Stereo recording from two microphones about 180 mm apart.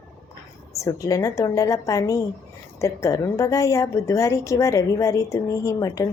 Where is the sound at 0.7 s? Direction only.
20° left (ahead or behind).